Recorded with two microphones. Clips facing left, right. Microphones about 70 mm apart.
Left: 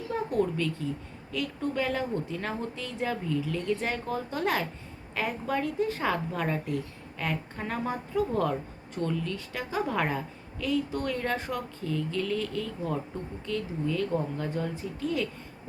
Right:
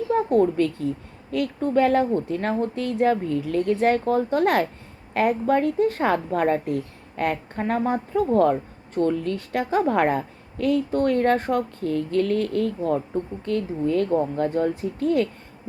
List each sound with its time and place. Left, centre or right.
0.1 s a woman's voice: right
13.4 s a woman's voice: right